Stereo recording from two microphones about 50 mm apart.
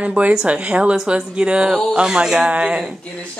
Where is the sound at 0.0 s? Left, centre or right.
Right.